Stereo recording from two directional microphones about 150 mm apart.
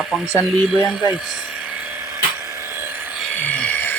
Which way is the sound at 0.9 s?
5° right (ahead or behind).